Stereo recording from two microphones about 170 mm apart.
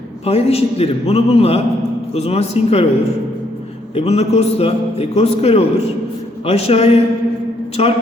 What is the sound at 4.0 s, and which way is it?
A man's voice, 40° left (ahead or behind).